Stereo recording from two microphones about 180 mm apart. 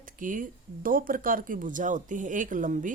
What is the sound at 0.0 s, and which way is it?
Speech, 50° right (ahead or behind).